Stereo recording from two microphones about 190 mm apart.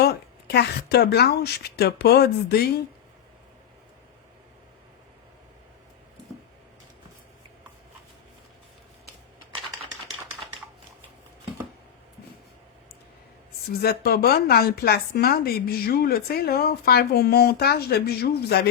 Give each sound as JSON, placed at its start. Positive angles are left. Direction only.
{"t": 0.0, "sound": "speech", "side_deg": 60}
{"t": 13.7, "sound": "speech", "side_deg": 55}